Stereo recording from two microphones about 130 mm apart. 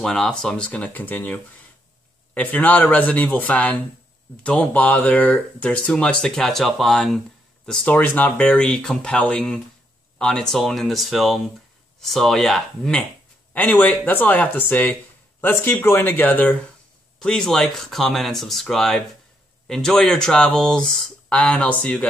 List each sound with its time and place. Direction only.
0.0 s speech: 5° left (ahead or behind)
13.5 s speech: 15° left (ahead or behind)